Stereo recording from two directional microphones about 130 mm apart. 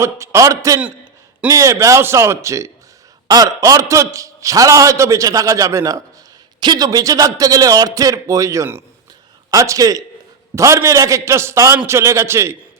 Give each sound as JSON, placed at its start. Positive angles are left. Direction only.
{"t": 0.0, "sound": "a man's voice", "side_deg": -25}